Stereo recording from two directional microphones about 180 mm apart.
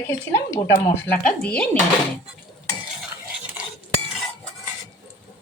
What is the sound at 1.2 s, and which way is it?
Speech, 5° left (ahead or behind).